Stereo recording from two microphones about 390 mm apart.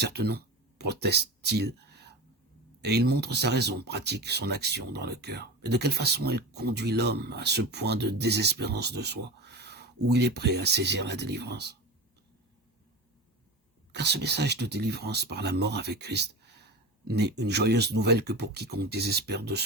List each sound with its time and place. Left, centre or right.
0.0 s speech: right
13.9 s speech: right